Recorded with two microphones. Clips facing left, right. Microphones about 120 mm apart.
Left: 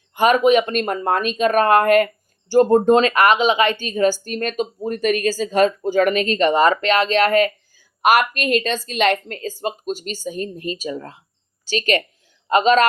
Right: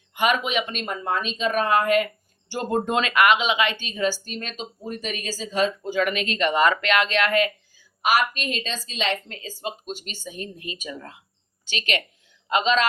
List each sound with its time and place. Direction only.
0.1 s speech: 40° left (ahead or behind)
2.5 s a woman's voice: 40° left (ahead or behind)